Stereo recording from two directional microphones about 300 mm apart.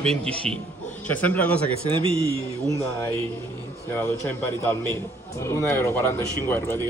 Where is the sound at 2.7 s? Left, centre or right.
Centre.